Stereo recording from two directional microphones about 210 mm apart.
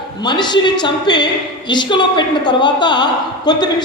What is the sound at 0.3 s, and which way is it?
A man's voice, 20° left (ahead or behind).